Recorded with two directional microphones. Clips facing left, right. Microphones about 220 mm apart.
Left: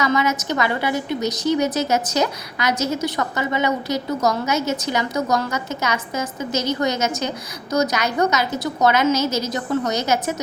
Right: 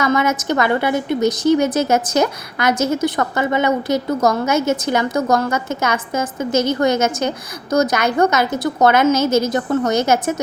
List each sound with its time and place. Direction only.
0.0 s a woman's voice: 50° right (ahead or behind)